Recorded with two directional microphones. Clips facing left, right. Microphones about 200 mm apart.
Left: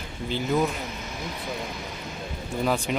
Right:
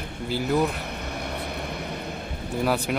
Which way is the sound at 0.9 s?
60° right (ahead or behind).